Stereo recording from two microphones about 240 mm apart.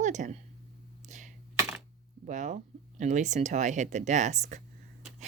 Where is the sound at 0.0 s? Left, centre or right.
Right.